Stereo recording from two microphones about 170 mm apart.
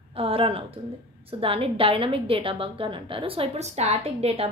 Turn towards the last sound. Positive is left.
turn(degrees=-35)  # may be behind; listen again after turning